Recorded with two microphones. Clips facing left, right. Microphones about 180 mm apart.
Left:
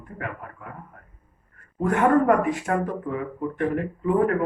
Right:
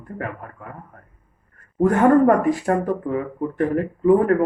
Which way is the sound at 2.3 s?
40° right (ahead or behind).